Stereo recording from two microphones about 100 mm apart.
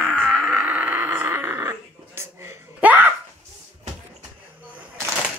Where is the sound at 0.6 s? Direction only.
15° right (ahead or behind).